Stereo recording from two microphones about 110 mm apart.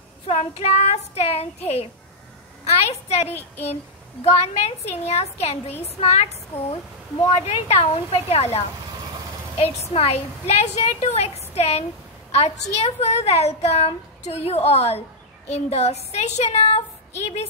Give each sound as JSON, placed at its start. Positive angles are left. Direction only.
{"t": 0.3, "sound": "a woman's voice", "side_deg": 90}